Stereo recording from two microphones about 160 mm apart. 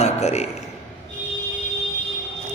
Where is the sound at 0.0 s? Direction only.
45° left (ahead or behind).